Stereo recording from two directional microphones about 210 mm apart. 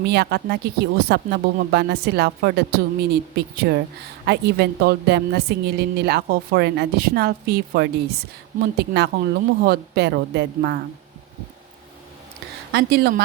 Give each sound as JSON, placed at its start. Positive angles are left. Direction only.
{"t": 0.0, "sound": "a woman's voice", "side_deg": -50}
{"t": 12.7, "sound": "a woman's voice", "side_deg": -50}